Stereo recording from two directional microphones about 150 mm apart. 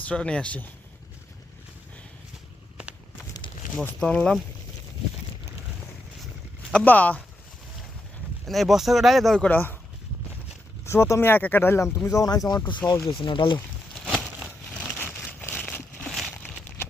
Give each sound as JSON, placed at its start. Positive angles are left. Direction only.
{"t": 0.0, "sound": "speech", "side_deg": 5}
{"t": 3.8, "sound": "speech", "side_deg": 5}
{"t": 6.7, "sound": "speech", "side_deg": 10}
{"t": 8.4, "sound": "speech", "side_deg": 0}
{"t": 10.8, "sound": "speech", "side_deg": 15}
{"t": 13.9, "sound": "a sound", "side_deg": 5}
{"t": 16.6, "sound": "a sound", "side_deg": 15}